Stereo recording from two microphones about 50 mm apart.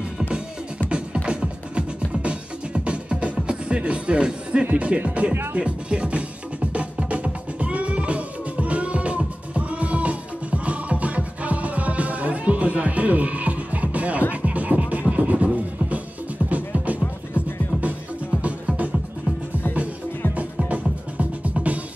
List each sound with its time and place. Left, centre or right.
0.8 s music: right
4.7 s speech: right
6.7 s music: right
18.4 s music: right
20.6 s music: right